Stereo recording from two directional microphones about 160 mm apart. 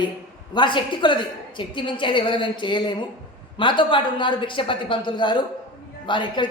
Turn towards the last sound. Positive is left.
turn(degrees=30)  # may be behind; listen again after turning